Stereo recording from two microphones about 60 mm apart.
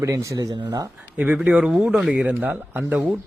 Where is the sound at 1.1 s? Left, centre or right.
Right.